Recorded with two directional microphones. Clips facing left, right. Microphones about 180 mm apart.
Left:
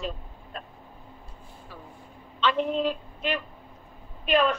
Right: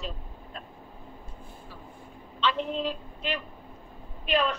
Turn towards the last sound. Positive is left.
turn(degrees=55)  # may be behind; listen again after turning